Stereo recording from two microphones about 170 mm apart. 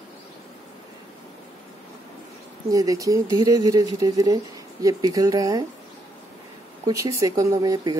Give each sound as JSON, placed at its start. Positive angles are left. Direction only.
{"t": 2.7, "sound": "speech", "side_deg": -20}
{"t": 6.9, "sound": "speech", "side_deg": -20}